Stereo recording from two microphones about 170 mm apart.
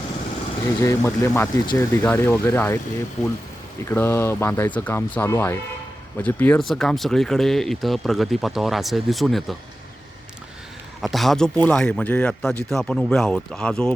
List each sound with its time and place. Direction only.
0.6 s speech: 15° left (ahead or behind)
3.8 s speech: 15° left (ahead or behind)
11.0 s speech: centre (ahead or behind)